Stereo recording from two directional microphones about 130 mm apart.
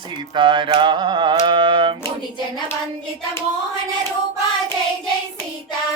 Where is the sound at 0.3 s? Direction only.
40° right (ahead or behind).